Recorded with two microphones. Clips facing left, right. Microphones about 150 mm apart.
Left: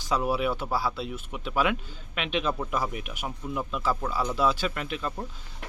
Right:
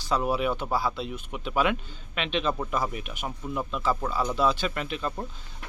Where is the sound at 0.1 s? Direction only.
5° left (ahead or behind).